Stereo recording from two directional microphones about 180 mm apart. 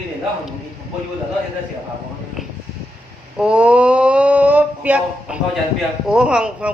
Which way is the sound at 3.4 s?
5° right (ahead or behind).